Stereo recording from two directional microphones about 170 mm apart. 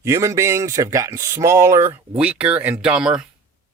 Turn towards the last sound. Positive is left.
turn(degrees=-5)  # may be behind; listen again after turning